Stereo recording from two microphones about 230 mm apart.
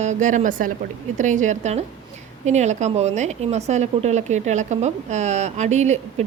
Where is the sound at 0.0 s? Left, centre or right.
Right.